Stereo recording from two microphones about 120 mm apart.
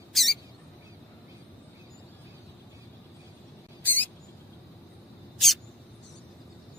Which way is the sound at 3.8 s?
15° left (ahead or behind).